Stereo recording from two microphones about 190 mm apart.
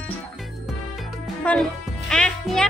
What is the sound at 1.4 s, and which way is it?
Music, 5° left (ahead or behind).